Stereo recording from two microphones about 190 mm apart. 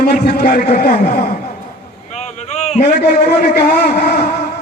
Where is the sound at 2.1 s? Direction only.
35° left (ahead or behind).